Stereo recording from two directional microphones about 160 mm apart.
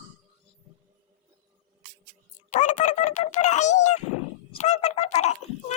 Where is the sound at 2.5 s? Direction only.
50° left (ahead or behind).